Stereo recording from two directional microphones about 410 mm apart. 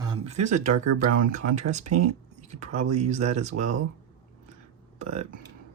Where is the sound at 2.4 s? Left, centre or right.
Centre.